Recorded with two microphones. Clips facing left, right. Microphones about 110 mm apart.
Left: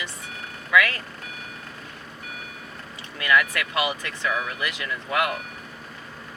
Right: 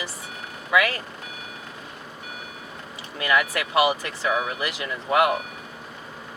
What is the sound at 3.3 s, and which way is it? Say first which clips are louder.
Speech: right 2 dB; 10° right (ahead or behind).